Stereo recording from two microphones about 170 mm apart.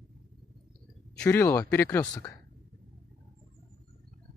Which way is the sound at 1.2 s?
15° left (ahead or behind).